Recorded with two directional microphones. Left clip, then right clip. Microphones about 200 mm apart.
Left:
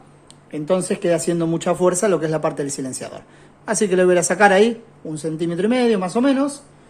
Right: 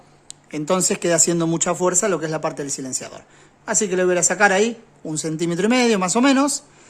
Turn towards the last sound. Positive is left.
turn(degrees=-35)  # may be behind; listen again after turning